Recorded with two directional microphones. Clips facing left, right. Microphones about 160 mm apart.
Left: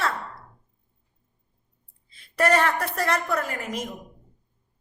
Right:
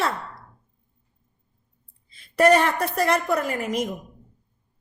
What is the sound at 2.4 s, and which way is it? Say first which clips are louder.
A woman's voice: right 4 dB; 20° right (ahead or behind).